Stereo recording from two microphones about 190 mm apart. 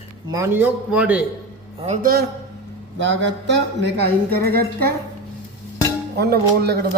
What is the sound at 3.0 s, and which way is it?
Speech, 75° right (ahead or behind).